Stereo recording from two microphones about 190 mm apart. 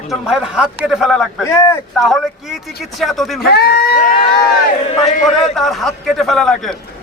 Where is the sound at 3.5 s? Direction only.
55° left (ahead or behind).